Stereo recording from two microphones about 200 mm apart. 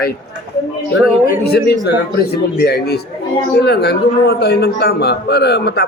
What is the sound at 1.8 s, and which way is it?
A man's voice, 50° left (ahead or behind).